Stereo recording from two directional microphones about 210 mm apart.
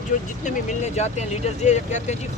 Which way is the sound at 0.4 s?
35° left (ahead or behind).